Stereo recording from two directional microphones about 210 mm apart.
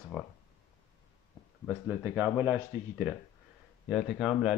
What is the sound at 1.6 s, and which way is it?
Speech, 10° right (ahead or behind).